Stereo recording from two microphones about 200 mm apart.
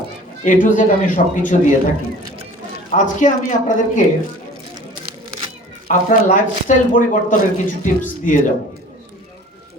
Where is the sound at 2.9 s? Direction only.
40° left (ahead or behind).